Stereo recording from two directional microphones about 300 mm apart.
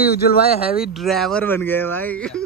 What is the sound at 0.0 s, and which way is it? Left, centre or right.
Speech, left.